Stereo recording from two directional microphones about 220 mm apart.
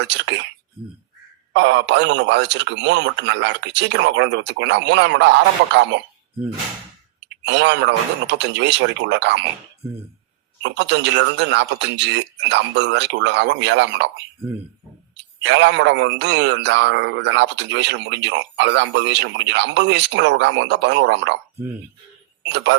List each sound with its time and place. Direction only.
0.1 s a man's voice: 50° right (ahead or behind)
1.5 s a man's voice: 55° right (ahead or behind)
7.4 s a man's voice: 50° right (ahead or behind)
10.6 s a man's voice: 50° right (ahead or behind)
15.4 s a man's voice: 55° right (ahead or behind)
22.4 s a man's voice: 50° right (ahead or behind)